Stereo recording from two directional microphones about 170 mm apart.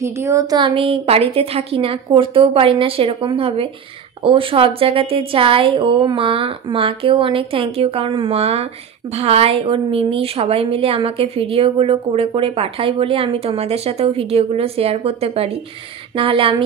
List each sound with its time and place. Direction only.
0.0 s a woman's voice: 15° right (ahead or behind); by 16.6 s 30° right (ahead or behind)